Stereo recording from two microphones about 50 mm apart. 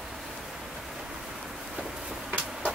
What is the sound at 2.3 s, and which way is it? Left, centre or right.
Vehicle, right.